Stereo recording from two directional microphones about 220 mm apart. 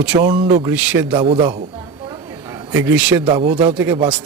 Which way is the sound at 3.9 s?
20° right (ahead or behind).